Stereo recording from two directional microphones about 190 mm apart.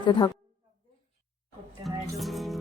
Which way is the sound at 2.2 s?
Centre (ahead or behind).